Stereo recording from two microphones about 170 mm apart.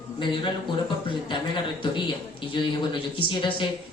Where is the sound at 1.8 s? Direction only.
30° left (ahead or behind).